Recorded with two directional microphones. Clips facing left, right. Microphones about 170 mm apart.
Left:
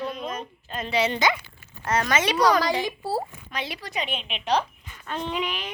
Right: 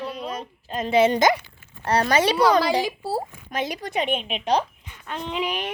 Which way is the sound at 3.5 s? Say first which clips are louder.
Right 6 dB; 45° right (ahead or behind).